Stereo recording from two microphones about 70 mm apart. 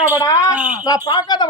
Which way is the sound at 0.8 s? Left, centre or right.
Left.